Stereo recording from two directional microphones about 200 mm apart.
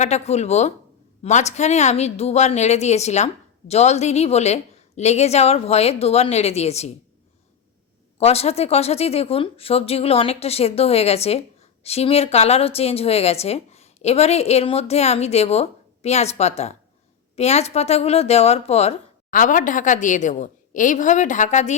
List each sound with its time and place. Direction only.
0.0 s speech: 35° left (ahead or behind)
8.2 s speech: 30° left (ahead or behind)